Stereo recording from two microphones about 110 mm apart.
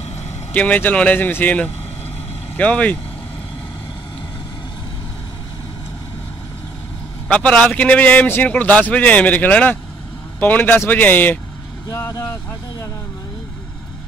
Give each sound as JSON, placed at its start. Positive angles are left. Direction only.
{"t": 0.5, "sound": "a man's voice", "side_deg": 15}
{"t": 7.2, "sound": "a man's voice", "side_deg": 10}
{"t": 11.9, "sound": "speech", "side_deg": 30}